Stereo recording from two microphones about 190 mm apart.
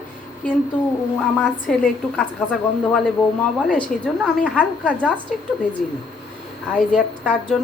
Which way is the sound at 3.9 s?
45° left (ahead or behind).